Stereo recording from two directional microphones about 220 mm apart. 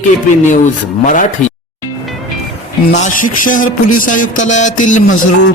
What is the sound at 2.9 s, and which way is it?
Speech, 35° left (ahead or behind).